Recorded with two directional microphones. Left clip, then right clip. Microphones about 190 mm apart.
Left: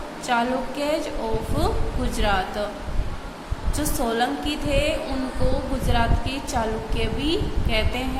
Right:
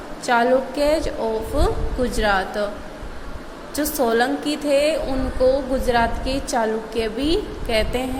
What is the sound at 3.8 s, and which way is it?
A woman's voice, 25° right (ahead or behind).